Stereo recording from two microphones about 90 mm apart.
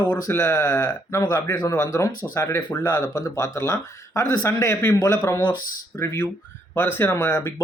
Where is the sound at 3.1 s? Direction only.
30° left (ahead or behind).